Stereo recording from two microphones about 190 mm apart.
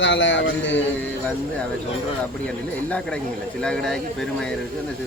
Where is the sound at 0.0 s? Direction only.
75° left (ahead or behind).